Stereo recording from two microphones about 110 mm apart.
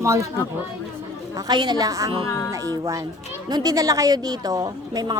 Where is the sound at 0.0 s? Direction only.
30° right (ahead or behind).